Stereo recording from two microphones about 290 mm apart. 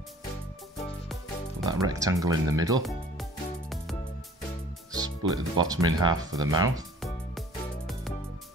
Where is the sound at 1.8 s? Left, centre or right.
Centre.